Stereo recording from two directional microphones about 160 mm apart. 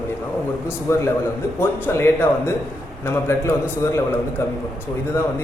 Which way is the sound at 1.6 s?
15° left (ahead or behind).